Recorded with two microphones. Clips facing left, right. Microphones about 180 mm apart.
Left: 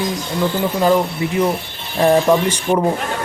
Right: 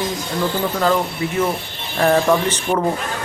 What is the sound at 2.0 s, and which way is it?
Speech, 15° left (ahead or behind).